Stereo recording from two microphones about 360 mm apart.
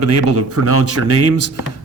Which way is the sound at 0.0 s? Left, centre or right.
Right.